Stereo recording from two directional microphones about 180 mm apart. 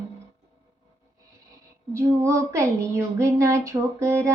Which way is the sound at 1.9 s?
15° right (ahead or behind).